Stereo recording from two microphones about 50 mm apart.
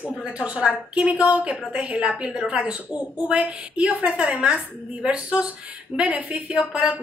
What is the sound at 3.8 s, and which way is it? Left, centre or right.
Speech, right.